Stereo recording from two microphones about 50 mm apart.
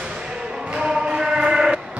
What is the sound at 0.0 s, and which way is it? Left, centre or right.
Music, centre.